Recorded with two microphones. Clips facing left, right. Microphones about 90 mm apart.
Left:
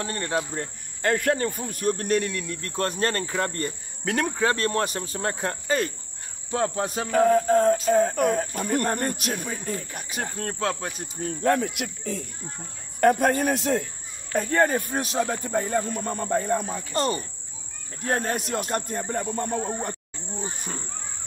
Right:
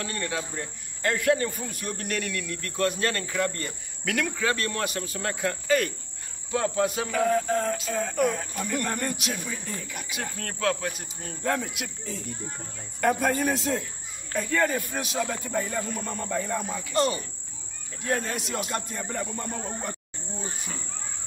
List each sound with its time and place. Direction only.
0.0 s speech: 40° left (ahead or behind)
0.6 s speech: 50° left (ahead or behind); by 10.9 s 30° left (ahead or behind)
11.4 s cricket: 55° left (ahead or behind)
14.3 s speech: 45° left (ahead or behind)
18.0 s cricket: 45° left (ahead or behind)